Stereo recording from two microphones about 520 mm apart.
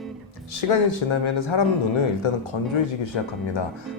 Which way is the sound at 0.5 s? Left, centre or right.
Left.